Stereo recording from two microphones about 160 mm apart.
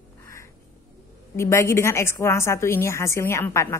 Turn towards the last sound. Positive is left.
turn(degrees=15)  # may be behind; listen again after turning